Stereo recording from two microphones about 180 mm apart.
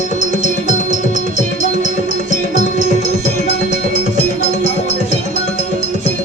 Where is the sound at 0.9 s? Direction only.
45° right (ahead or behind).